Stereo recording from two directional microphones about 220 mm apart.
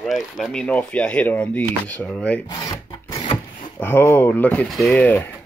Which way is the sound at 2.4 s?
15° left (ahead or behind).